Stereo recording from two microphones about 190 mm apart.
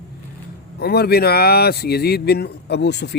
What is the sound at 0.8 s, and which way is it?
Speech, 55° left (ahead or behind).